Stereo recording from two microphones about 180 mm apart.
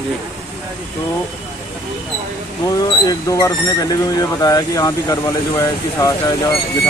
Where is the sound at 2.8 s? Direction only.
20° left (ahead or behind).